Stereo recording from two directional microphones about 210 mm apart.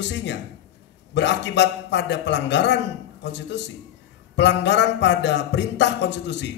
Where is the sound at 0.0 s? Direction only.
55° left (ahead or behind).